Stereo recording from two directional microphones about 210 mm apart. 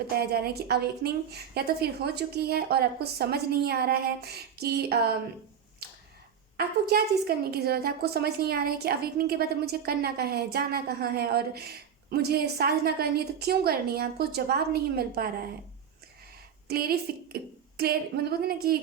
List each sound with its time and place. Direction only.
0.2 s a woman's voice: 45° right (ahead or behind)
5.8 s finger snapping: 50° right (ahead or behind)
6.6 s a woman's voice: 50° right (ahead or behind)
16.6 s a woman's voice: 45° right (ahead or behind)